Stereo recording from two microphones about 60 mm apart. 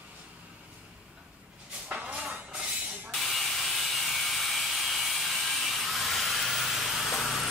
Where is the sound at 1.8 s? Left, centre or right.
Right.